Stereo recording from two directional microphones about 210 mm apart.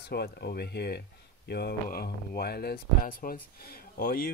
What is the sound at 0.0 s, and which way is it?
Speech, 50° left (ahead or behind).